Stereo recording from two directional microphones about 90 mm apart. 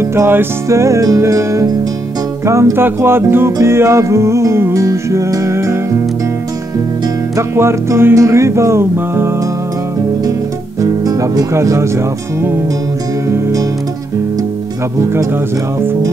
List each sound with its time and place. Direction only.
0.0 s music: 30° right (ahead or behind)
7.3 s music: 30° right (ahead or behind)
10.8 s speech: 40° right (ahead or behind)
13.3 s music: 40° right (ahead or behind)